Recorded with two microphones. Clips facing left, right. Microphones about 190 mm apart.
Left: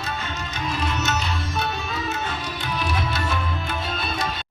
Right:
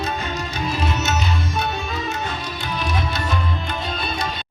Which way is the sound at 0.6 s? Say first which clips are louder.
Right 2 dB; 25° right (ahead or behind).